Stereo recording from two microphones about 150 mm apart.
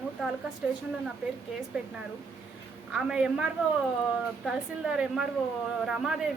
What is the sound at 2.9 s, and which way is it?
Speech, 5° right (ahead or behind).